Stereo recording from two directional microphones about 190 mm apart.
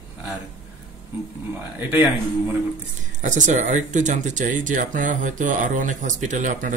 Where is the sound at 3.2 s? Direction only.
40° right (ahead or behind).